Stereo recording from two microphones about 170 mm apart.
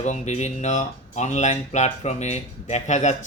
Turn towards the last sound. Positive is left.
turn(degrees=45)  # may be behind; listen again after turning